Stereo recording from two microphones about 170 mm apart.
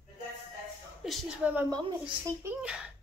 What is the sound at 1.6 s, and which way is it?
Speech, 25° right (ahead or behind).